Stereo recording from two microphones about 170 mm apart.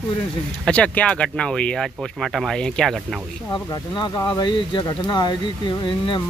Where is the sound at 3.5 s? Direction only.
25° left (ahead or behind).